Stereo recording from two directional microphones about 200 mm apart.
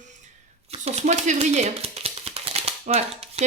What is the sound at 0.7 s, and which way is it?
Speech, 35° right (ahead or behind).